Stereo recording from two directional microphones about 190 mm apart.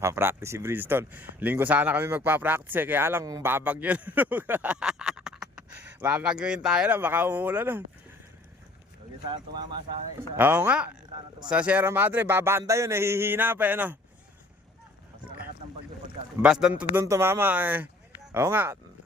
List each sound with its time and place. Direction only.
0.0 s speech: 15° right (ahead or behind)
9.3 s speech: 25° right (ahead or behind)
10.3 s speech: 10° right (ahead or behind)
16.4 s speech: 5° right (ahead or behind)